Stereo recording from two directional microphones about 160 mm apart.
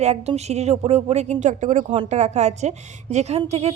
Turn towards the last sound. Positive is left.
turn(degrees=-40)  # may be behind; listen again after turning